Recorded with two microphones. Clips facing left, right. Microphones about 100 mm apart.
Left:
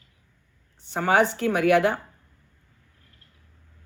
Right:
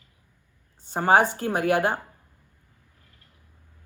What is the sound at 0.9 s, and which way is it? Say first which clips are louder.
Speech: right 1 dB; 45° right (ahead or behind).